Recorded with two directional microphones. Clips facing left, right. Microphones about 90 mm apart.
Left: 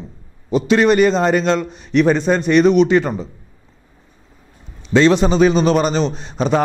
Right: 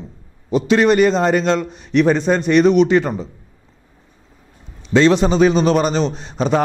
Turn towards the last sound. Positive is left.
turn(degrees=20)  # may be behind; listen again after turning